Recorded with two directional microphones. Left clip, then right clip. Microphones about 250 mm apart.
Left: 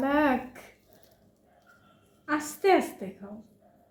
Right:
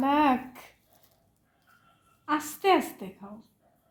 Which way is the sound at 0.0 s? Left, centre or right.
Right.